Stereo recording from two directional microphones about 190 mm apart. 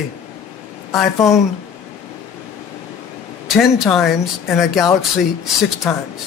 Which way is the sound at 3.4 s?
Centre (ahead or behind).